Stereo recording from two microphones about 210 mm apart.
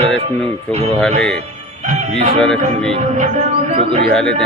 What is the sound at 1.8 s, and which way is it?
Music, 35° right (ahead or behind).